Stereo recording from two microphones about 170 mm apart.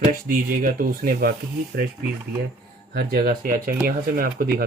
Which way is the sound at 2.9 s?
65° right (ahead or behind).